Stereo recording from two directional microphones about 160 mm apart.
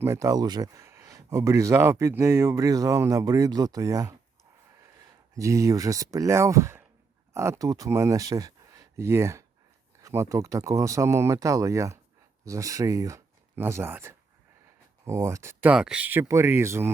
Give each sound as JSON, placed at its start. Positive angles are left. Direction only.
{"t": 0.0, "sound": "speech", "side_deg": -20}
{"t": 5.3, "sound": "speech", "side_deg": -20}
{"t": 15.7, "sound": "speech", "side_deg": -5}